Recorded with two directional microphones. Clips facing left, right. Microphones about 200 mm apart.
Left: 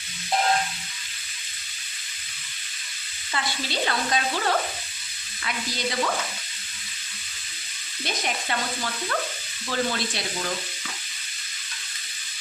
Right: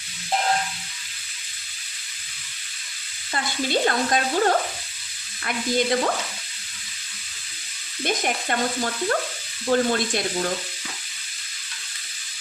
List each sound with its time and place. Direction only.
3.3 s stir: 45° right (ahead or behind)
8.0 s stir: 45° right (ahead or behind)